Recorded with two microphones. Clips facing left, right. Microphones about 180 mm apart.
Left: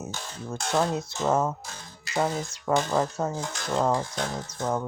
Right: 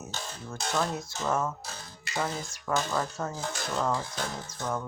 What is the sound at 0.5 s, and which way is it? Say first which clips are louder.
Speech: left 5 dB; 25° left (ahead or behind).